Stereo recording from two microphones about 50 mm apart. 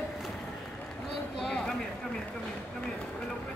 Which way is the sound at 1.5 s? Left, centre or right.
Centre.